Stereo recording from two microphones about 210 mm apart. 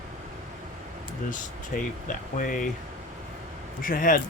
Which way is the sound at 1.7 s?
45° left (ahead or behind).